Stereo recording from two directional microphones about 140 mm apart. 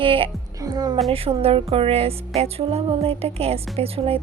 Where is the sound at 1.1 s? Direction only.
45° right (ahead or behind).